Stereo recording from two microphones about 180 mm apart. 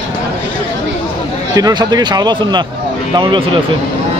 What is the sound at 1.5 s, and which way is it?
Speech, 20° right (ahead or behind).